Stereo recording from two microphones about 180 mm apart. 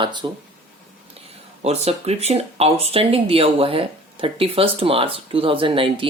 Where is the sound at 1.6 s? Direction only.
35° right (ahead or behind).